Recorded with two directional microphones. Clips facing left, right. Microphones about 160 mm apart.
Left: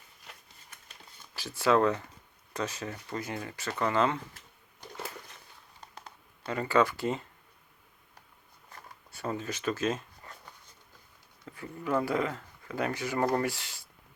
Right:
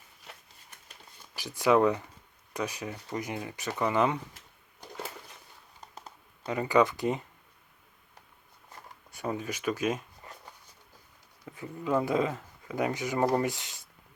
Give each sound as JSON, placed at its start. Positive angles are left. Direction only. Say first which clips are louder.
{"t": 1.3, "sound": "speech", "louder": "right 2 dB", "side_deg": -15}
{"t": 6.4, "sound": "speech", "louder": "right 2 dB", "side_deg": -15}
{"t": 8.7, "sound": "zipper", "louder": "right 1 dB", "side_deg": -15}
{"t": 11.4, "sound": "speech", "louder": "right 2 dB", "side_deg": -15}